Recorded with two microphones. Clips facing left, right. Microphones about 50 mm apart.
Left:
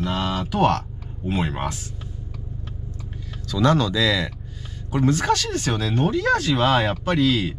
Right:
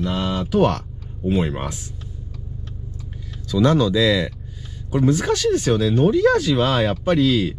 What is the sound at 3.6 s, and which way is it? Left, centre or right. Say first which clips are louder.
Speech: right 2 dB; centre.